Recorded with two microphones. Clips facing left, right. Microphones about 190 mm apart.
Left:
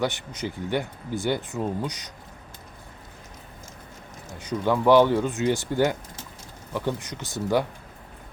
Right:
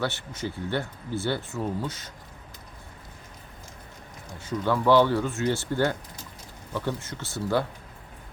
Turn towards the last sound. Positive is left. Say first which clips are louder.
# left 2 dB
turn(degrees=15)  # may be behind; listen again after turning